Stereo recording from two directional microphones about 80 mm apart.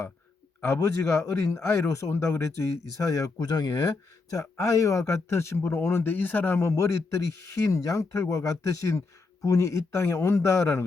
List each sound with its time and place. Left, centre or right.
0.6 s speech: left
3.3 s speech: left
4.4 s speech: left